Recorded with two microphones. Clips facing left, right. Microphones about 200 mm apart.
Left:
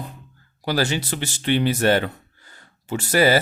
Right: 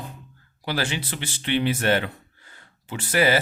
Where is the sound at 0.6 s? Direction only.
40° left (ahead or behind).